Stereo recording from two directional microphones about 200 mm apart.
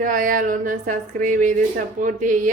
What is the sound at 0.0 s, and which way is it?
A woman's voice, 45° right (ahead or behind).